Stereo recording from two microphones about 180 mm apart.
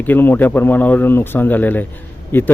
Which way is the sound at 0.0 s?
10° left (ahead or behind).